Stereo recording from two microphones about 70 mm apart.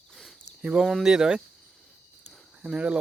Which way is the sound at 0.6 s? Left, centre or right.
Centre.